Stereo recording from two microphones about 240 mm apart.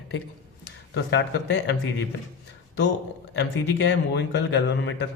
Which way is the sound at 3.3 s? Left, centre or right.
Left.